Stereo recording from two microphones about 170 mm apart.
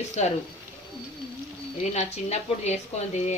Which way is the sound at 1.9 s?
40° left (ahead or behind).